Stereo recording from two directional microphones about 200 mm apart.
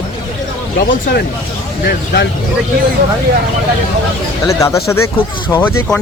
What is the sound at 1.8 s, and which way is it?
Speech, 55° left (ahead or behind).